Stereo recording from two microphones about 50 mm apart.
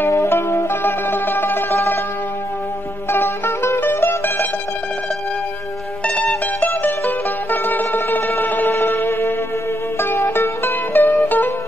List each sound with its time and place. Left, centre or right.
0.2 s music: left
3.1 s mandolin: left
6.0 s mandolin: left
6.6 s music: left